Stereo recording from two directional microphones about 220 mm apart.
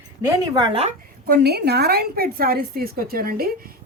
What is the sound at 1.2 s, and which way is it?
A woman's voice, 45° right (ahead or behind).